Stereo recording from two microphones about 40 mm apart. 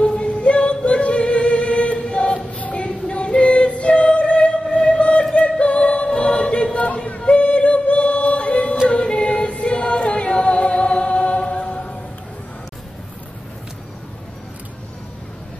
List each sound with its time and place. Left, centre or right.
0.0 s yodeling: left
5.3 s choir: left
7.2 s yodeling: left
8.8 s a capella: left